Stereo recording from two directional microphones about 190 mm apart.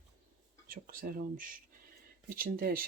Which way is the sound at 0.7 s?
50° right (ahead or behind).